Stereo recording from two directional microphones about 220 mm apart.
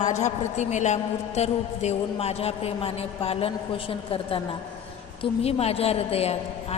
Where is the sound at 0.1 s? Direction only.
30° left (ahead or behind).